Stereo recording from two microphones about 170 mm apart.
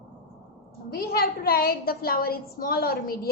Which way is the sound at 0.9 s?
65° left (ahead or behind).